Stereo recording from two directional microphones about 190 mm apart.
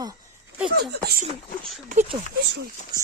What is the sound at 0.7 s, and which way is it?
Speech, 55° right (ahead or behind).